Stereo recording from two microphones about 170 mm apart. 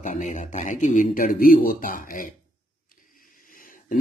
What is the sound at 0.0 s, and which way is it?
Speech, 45° left (ahead or behind).